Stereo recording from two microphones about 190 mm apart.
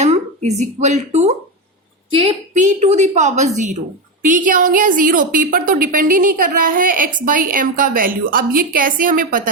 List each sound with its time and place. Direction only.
0.0 s a woman's voice: 35° right (ahead or behind)